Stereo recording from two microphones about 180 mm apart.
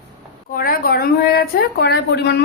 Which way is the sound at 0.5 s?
55° left (ahead or behind).